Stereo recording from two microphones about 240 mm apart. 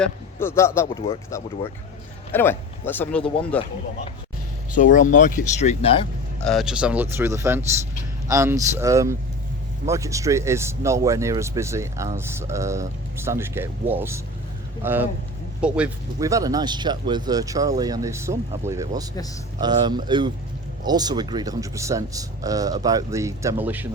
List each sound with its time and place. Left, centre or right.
0.0 s a man's voice: centre
4.8 s speech: left
6.4 s speech: centre